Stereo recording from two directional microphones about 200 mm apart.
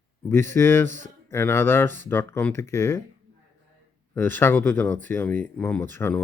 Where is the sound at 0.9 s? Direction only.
40° right (ahead or behind).